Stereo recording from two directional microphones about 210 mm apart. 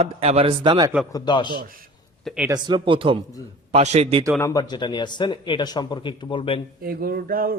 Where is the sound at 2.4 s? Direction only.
20° right (ahead or behind).